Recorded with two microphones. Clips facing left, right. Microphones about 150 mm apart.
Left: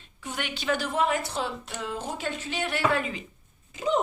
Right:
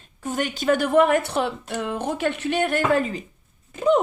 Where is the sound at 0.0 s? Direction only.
45° right (ahead or behind).